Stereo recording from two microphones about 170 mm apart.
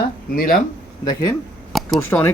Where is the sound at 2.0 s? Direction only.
10° left (ahead or behind).